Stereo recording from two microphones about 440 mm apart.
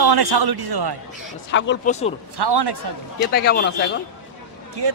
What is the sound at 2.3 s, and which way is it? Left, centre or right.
Speech, right.